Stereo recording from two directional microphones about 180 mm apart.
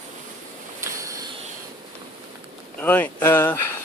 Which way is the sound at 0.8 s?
15° right (ahead or behind).